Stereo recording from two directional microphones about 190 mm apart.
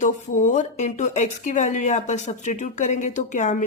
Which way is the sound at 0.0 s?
40° left (ahead or behind).